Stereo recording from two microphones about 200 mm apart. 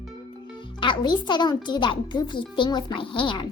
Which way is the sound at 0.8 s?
25° left (ahead or behind).